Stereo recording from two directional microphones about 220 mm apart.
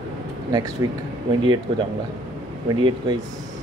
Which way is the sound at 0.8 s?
15° right (ahead or behind).